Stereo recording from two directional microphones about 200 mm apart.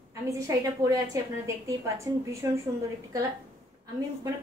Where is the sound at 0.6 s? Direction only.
15° right (ahead or behind).